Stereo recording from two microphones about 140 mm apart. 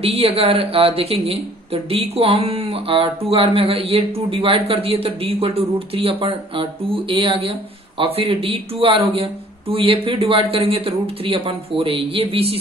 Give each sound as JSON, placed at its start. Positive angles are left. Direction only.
{"t": 0.0, "sound": "speech", "side_deg": -45}